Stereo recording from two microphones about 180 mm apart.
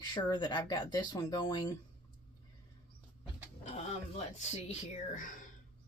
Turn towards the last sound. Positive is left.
turn(degrees=45)  # may be behind; listen again after turning